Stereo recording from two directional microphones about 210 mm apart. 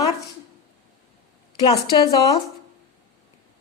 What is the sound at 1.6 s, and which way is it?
Speech, 20° left (ahead or behind).